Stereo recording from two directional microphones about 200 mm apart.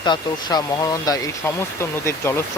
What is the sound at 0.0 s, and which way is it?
Speech, 20° left (ahead or behind).